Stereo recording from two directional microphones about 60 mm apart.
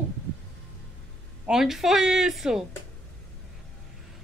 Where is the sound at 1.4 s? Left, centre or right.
Centre.